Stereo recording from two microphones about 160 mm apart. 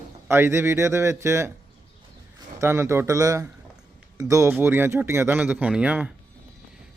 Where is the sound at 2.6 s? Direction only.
15° right (ahead or behind).